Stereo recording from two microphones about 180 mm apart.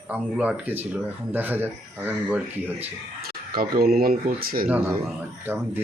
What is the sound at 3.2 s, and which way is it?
Speech, 55° right (ahead or behind).